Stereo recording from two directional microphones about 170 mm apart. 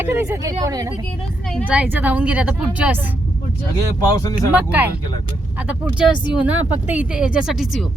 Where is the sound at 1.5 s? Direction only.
Centre (ahead or behind).